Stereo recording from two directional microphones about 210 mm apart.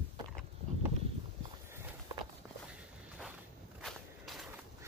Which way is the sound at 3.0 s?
5° right (ahead or behind).